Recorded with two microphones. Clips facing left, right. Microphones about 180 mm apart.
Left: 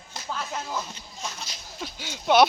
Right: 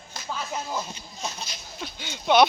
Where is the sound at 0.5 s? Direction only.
20° right (ahead or behind).